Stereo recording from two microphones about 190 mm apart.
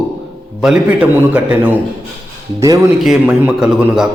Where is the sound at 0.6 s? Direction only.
5° right (ahead or behind).